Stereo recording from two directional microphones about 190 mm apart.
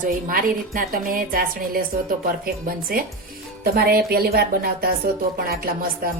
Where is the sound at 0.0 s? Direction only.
45° right (ahead or behind).